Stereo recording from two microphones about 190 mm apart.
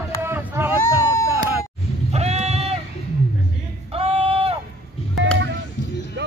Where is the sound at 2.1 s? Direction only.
35° right (ahead or behind).